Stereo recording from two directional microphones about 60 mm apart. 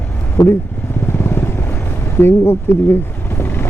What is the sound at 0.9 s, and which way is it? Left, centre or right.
Vehicle, left.